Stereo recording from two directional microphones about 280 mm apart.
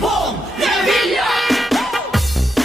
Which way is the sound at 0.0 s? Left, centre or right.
Centre.